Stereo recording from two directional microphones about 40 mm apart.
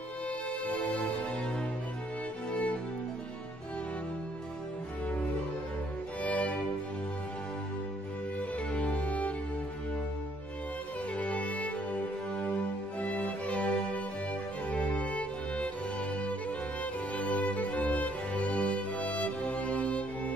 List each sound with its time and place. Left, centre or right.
0.7 s music: left
2.5 s music: left
6.2 s music: left
8.4 s music: left
11.1 s music: left